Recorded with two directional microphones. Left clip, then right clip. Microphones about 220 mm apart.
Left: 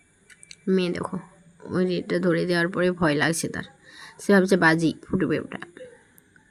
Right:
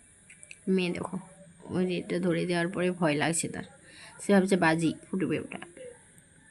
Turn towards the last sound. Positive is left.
turn(degrees=20)  # may be behind; listen again after turning